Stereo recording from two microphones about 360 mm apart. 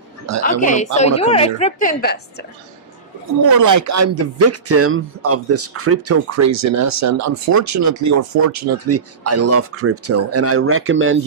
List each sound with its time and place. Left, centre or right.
0.6 s a woman's voice: left
3.6 s speech: right